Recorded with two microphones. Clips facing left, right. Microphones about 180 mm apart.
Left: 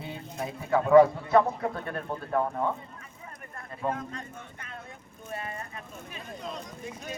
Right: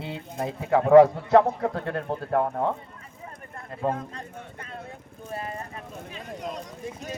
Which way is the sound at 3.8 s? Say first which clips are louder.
Right 3 dB; 35° right (ahead or behind).